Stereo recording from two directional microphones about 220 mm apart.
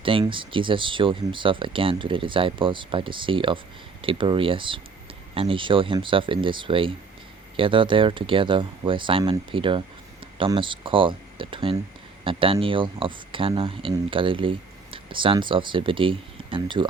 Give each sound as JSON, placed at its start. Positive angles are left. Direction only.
{"t": 0.0, "sound": "speech", "side_deg": -25}